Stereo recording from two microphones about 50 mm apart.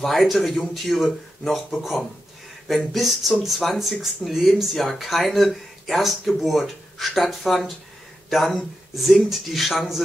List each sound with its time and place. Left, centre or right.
0.0 s speech: centre